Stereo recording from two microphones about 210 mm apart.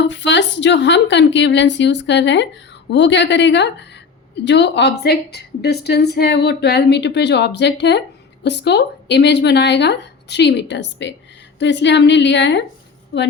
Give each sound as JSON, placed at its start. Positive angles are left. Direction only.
{"t": 0.0, "sound": "a woman's voice", "side_deg": 55}